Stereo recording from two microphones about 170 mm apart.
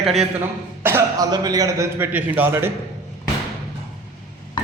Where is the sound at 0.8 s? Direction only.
15° right (ahead or behind).